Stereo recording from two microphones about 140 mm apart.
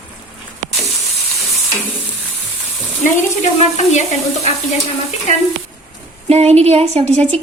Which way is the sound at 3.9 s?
55° left (ahead or behind).